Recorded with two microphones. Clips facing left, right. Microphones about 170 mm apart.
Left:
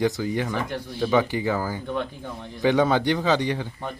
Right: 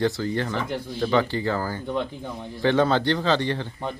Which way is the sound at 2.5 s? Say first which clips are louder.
Even; 15° left (ahead or behind).